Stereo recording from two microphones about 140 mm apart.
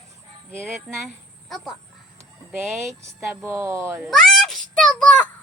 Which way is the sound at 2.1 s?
20° right (ahead or behind).